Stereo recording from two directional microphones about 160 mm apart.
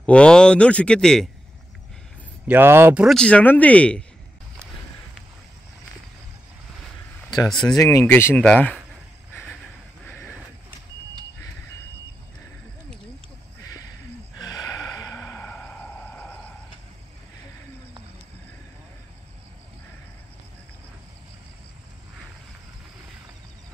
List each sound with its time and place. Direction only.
0.0 s speech: 5° left (ahead or behind)
2.4 s speech: 10° right (ahead or behind)
3.2 s speech: 10° left (ahead or behind)
7.4 s speech: 5° left (ahead or behind)
7.7 s speech: 20° left (ahead or behind)
10.0 s a sound: 10° left (ahead or behind)
14.4 s gasp: 20° left (ahead or behind)